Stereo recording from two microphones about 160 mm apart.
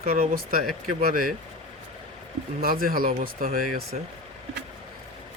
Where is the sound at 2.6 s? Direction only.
65° right (ahead or behind).